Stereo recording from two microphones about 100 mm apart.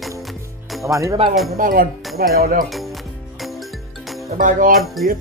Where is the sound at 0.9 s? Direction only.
30° right (ahead or behind).